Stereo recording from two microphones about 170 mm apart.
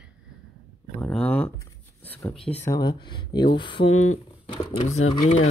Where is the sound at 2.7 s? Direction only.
25° left (ahead or behind).